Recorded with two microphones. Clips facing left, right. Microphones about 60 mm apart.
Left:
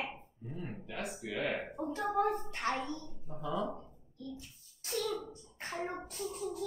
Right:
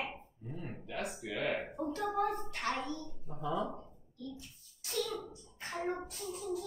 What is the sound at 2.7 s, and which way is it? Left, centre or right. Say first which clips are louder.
Speech: left 2 dB; left.